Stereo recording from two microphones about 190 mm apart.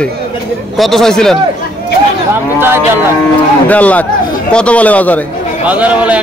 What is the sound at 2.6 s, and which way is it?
Speech, 10° right (ahead or behind).